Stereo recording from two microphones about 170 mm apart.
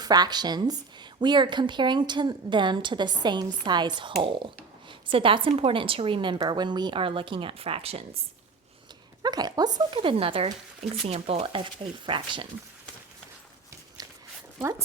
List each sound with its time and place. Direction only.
0.0 s a woman's voice: 25° right (ahead or behind)
9.2 s a woman's voice: 25° right (ahead or behind)